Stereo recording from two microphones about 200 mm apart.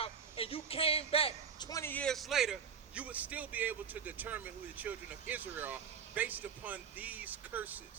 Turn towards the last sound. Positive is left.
turn(degrees=-10)  # may be behind; listen again after turning